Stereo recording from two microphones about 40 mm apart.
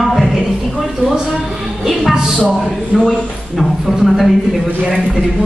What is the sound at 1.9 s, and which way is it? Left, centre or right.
A woman's voice, centre.